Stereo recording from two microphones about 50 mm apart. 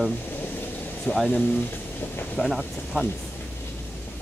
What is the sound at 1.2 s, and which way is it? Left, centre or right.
Speech, left.